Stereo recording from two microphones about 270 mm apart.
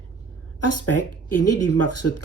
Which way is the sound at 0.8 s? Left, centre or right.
Left.